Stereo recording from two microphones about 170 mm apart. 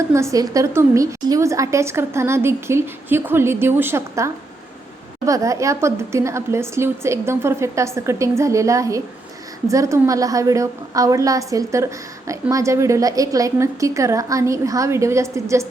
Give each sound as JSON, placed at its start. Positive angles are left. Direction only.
{"t": 0.1, "sound": "a woman's voice", "side_deg": -15}